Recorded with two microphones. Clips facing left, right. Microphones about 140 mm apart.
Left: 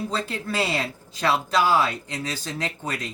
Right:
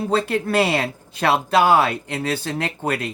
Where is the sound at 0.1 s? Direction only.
60° right (ahead or behind).